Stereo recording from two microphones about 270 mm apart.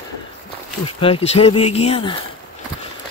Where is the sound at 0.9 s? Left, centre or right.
Centre.